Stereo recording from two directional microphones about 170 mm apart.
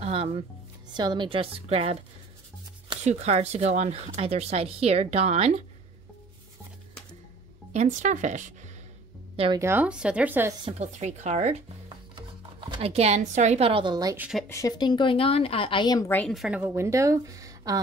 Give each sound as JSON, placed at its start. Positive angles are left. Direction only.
{"t": 0.0, "sound": "music", "side_deg": -35}
{"t": 0.9, "sound": "speech", "side_deg": -25}
{"t": 3.0, "sound": "speech", "side_deg": -40}
{"t": 7.7, "sound": "a woman's voice", "side_deg": -45}
{"t": 9.6, "sound": "a woman's voice", "side_deg": -10}
{"t": 10.6, "sound": "speech", "side_deg": -40}
{"t": 12.2, "sound": "speech", "side_deg": -30}
{"t": 14.1, "sound": "a woman's voice", "side_deg": -10}
{"t": 14.5, "sound": "speech", "side_deg": 20}
{"t": 16.1, "sound": "a woman's voice", "side_deg": 10}
{"t": 16.3, "sound": "a woman's voice", "side_deg": -5}